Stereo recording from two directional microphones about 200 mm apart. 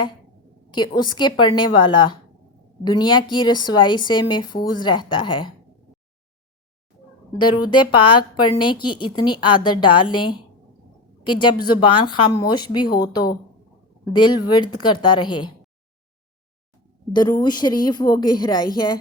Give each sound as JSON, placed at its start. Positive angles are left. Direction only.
{"t": 0.7, "sound": "a woman's voice", "side_deg": 20}
{"t": 7.3, "sound": "a woman's voice", "side_deg": 20}
{"t": 17.1, "sound": "a woman's voice", "side_deg": 20}